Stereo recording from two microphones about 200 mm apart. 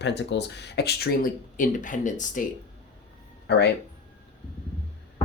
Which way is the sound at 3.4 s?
55° left (ahead or behind).